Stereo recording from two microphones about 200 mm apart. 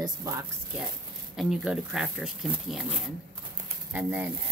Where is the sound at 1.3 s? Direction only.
Centre (ahead or behind).